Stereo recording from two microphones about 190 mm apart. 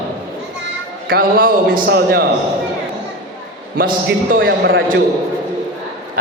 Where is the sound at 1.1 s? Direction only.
50° right (ahead or behind).